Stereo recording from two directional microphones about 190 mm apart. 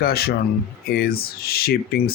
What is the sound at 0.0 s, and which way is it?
Speech, 55° left (ahead or behind).